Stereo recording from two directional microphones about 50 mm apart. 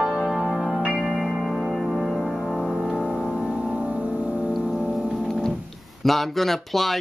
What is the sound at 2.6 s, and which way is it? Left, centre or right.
Music, centre.